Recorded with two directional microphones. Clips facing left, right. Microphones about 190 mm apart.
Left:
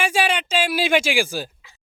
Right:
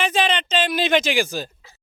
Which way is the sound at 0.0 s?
10° left (ahead or behind).